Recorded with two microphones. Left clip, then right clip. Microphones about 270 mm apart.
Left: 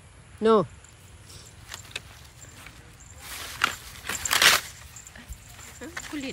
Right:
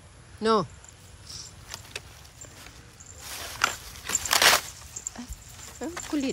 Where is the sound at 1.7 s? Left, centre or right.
Right.